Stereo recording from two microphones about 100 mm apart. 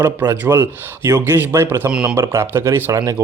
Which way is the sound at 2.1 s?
25° right (ahead or behind).